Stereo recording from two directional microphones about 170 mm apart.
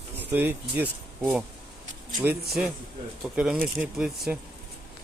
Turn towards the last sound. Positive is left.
turn(degrees=-5)  # may be behind; listen again after turning